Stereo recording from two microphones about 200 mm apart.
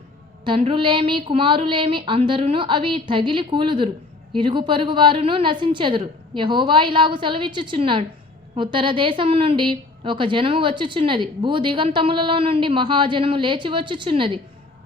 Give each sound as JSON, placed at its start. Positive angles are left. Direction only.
{"t": 0.4, "sound": "a woman's voice", "side_deg": -25}